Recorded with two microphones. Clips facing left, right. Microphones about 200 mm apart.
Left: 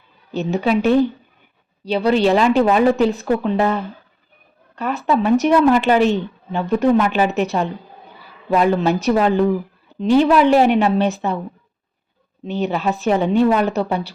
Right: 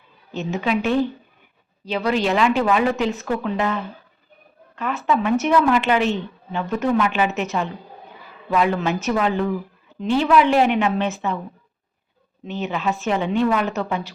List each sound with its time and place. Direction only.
0.3 s a woman's voice: 35° left (ahead or behind)
12.5 s a woman's voice: 35° left (ahead or behind)